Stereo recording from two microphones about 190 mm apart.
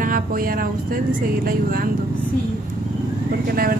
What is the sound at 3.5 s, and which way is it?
Speech, 50° right (ahead or behind).